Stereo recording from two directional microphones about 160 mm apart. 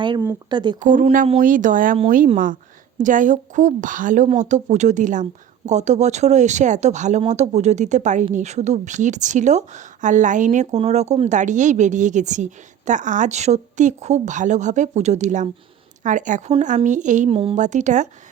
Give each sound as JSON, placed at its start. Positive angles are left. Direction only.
{"t": 0.5, "sound": "speech", "side_deg": -30}
{"t": 0.8, "sound": "speech", "side_deg": -55}
{"t": 17.2, "sound": "a woman's voice", "side_deg": -35}
{"t": 17.6, "sound": "speech", "side_deg": -50}